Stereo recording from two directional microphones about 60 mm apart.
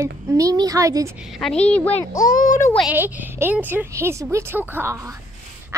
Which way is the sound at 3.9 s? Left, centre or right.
Right.